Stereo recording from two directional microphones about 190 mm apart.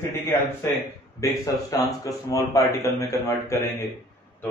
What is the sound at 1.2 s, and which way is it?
A man's voice, 15° left (ahead or behind).